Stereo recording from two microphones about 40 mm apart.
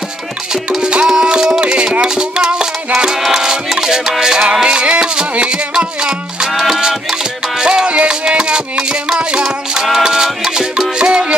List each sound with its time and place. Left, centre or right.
0.8 s music: centre
6.5 s music: centre
11.0 s music: right